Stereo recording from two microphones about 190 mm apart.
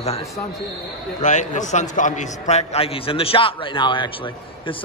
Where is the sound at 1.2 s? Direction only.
40° left (ahead or behind).